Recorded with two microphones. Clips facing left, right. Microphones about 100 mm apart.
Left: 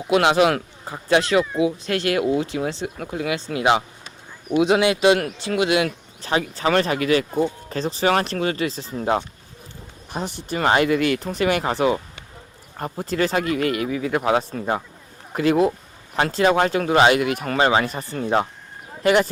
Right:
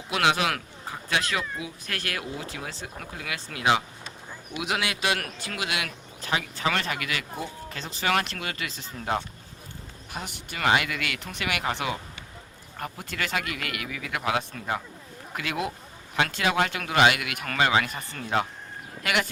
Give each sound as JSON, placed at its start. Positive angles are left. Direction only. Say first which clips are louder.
{"t": 0.1, "sound": "speech", "louder": "left 8 dB", "side_deg": 25}
{"t": 10.1, "sound": "speech", "louder": "left 10 dB", "side_deg": 35}